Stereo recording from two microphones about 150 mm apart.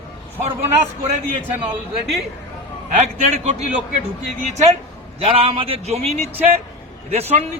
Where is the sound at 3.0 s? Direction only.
50° right (ahead or behind).